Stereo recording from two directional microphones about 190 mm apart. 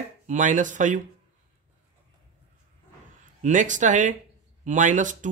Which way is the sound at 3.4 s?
40° right (ahead or behind).